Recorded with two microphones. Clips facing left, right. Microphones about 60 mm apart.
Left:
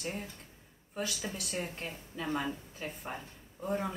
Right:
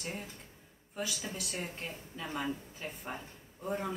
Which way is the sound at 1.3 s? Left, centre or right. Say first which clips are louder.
Left 1 dB; centre.